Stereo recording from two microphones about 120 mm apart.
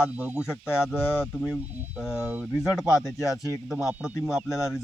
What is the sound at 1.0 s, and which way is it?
Speech, 20° left (ahead or behind).